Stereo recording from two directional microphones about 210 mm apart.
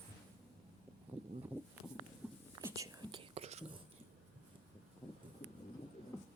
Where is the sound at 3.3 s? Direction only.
30° right (ahead or behind).